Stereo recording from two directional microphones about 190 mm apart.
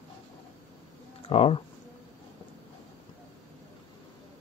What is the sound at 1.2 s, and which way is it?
Speech, 30° left (ahead or behind).